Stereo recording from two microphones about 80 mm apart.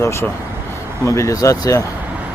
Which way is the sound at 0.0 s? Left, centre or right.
Left.